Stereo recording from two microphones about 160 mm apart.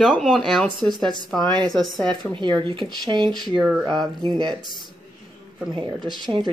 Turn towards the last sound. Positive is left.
turn(degrees=-30)  # may be behind; listen again after turning